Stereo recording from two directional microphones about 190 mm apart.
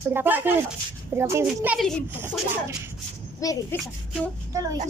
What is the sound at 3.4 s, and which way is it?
Speech, 15° left (ahead or behind).